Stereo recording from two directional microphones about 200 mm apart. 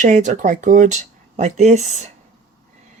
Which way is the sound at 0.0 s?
35° right (ahead or behind).